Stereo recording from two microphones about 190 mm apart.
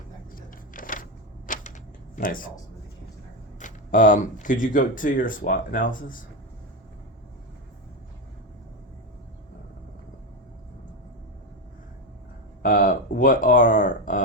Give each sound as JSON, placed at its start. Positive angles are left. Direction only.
{"t": 0.3, "sound": "a sound", "side_deg": 45}
{"t": 2.1, "sound": "speech", "side_deg": 45}
{"t": 3.6, "sound": "speech", "side_deg": 40}
{"t": 12.6, "sound": "speech", "side_deg": 45}